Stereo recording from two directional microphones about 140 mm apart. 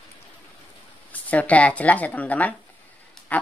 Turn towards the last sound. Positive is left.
turn(degrees=10)  # may be behind; listen again after turning